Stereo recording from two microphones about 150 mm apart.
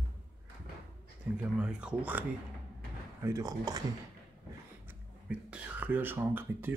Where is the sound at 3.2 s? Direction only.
20° right (ahead or behind).